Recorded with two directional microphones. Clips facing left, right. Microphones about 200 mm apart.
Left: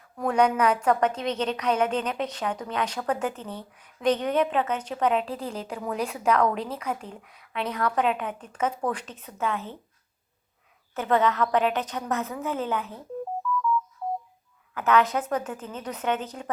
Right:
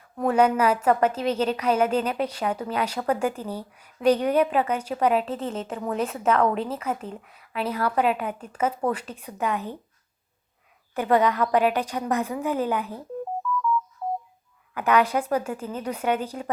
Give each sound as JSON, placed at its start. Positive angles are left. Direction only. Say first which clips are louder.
{"t": 0.2, "sound": "a woman's voice", "louder": "right 2 dB", "side_deg": -5}
{"t": 10.9, "sound": "a woman's voice", "louder": "right 2 dB", "side_deg": -10}
{"t": 13.4, "sound": "ringtone", "louder": "even", "side_deg": -50}
{"t": 14.8, "sound": "a woman's voice", "louder": "right 1 dB", "side_deg": -10}